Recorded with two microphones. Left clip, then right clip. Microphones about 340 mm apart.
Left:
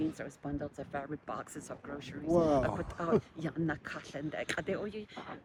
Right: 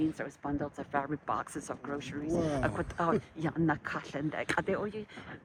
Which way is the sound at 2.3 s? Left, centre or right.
Centre.